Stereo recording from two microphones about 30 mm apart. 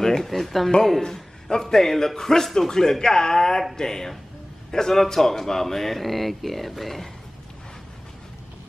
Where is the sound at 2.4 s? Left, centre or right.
Centre.